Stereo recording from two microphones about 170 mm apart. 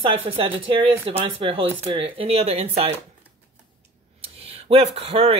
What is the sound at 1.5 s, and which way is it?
Speech, 30° right (ahead or behind).